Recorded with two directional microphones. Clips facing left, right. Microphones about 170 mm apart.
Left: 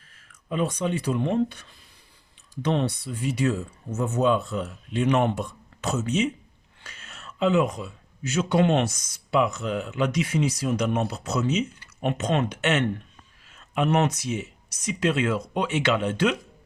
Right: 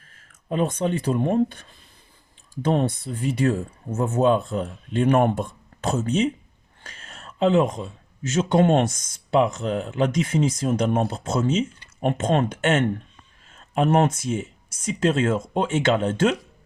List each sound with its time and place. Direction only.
0.1 s speech: 50° right (ahead or behind)
7.0 s a sound: 50° right (ahead or behind)
7.7 s a man's voice: 25° right (ahead or behind)
8.5 s speech: 50° right (ahead or behind)